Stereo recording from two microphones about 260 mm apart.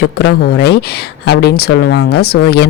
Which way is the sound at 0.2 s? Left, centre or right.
Left.